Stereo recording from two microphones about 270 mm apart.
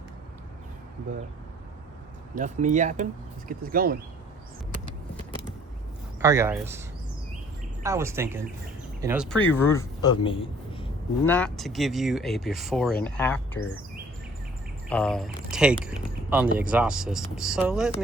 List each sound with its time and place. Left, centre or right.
2.3 s speech: right
6.2 s speech: centre
7.9 s speech: centre
9.3 s a man's voice: centre
11.3 s speech: centre
14.8 s speech: centre